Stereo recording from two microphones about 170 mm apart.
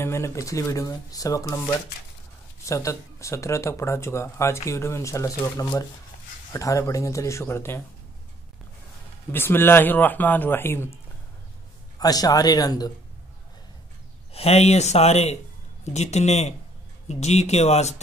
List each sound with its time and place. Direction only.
0.0 s speech: 15° left (ahead or behind)
2.6 s speech: 20° left (ahead or behind)
9.3 s speech: 15° left (ahead or behind)
12.0 s speech: 20° left (ahead or behind)
14.3 s speech: 40° left (ahead or behind)